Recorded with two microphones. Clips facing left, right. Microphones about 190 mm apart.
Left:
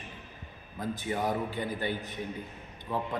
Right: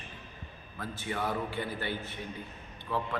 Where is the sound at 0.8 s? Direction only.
15° left (ahead or behind).